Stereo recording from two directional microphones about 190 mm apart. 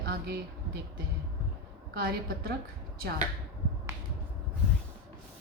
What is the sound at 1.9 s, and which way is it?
Speech, 55° right (ahead or behind).